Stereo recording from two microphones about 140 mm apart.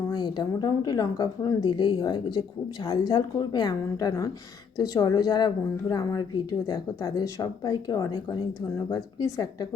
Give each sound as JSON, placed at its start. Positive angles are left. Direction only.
{"t": 0.1, "sound": "a woman's voice", "side_deg": 30}